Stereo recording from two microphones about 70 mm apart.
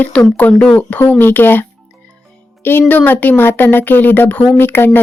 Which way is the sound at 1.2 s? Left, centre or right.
Left.